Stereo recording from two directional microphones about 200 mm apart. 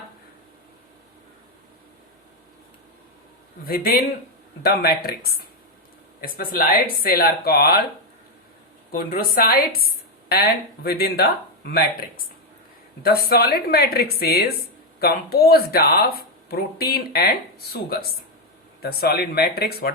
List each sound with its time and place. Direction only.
3.7 s a woman's voice: 50° left (ahead or behind)
8.9 s a woman's voice: 45° left (ahead or behind)